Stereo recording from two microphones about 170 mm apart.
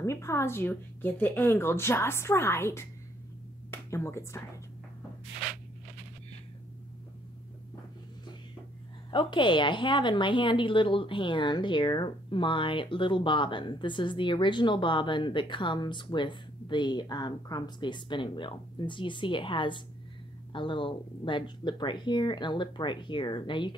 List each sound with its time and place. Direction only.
0.0 s speech: 15° left (ahead or behind)
9.1 s a woman's voice: 30° left (ahead or behind)